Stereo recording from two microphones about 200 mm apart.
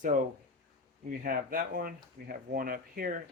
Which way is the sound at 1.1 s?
45° right (ahead or behind).